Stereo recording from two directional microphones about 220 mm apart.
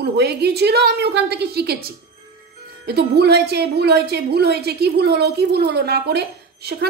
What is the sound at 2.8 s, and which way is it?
A woman's voice, 50° right (ahead or behind).